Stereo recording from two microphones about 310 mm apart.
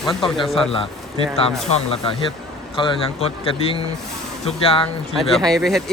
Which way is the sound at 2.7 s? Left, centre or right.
Centre.